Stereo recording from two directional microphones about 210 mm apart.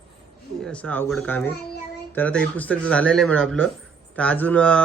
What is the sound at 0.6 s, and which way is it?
Speech, 5° left (ahead or behind).